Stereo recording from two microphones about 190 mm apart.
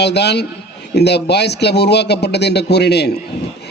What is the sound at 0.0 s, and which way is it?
A man's voice, 60° left (ahead or behind).